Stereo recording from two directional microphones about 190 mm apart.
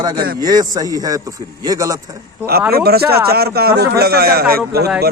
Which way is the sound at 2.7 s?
55° right (ahead or behind).